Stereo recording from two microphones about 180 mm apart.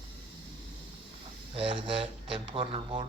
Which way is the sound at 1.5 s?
30° right (ahead or behind).